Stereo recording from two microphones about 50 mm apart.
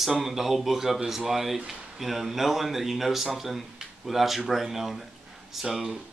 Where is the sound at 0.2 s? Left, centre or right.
Centre.